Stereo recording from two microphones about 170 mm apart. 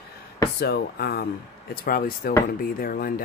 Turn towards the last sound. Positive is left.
turn(degrees=60)  # may be behind; listen again after turning